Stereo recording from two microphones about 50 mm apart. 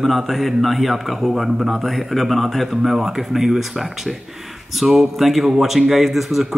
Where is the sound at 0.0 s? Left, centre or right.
Centre.